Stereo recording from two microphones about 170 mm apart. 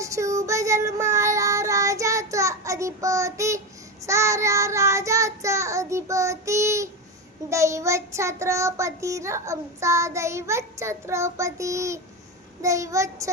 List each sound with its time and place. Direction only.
0.0 s child singing: 20° right (ahead or behind)